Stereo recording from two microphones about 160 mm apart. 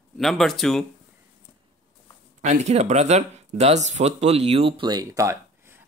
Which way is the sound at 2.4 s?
45° right (ahead or behind).